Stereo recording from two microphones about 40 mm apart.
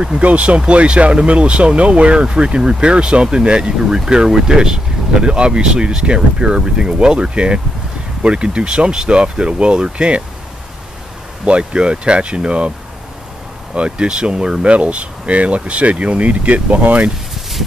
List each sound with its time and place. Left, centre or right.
0.0 s speech: right
11.4 s speech: right
13.7 s speech: right